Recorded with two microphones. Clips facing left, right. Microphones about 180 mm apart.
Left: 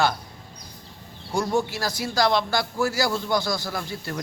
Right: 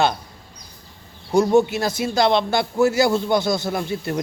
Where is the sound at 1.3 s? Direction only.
20° right (ahead or behind).